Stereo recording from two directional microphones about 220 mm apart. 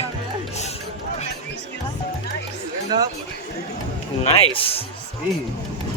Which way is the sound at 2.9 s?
20° right (ahead or behind).